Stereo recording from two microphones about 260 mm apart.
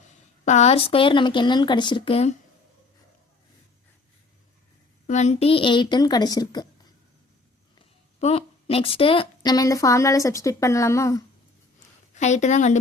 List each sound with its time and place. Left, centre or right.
0.4 s speech: left
5.0 s a woman's voice: left
7.8 s a woman's voice: left
12.1 s speech: left